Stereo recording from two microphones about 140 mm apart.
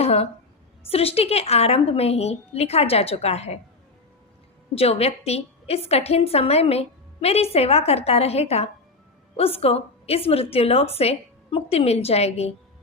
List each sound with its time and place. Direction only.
0.0 s a sound: 50° left (ahead or behind)
0.9 s a woman's voice: 45° left (ahead or behind)
4.8 s a woman's voice: 50° left (ahead or behind)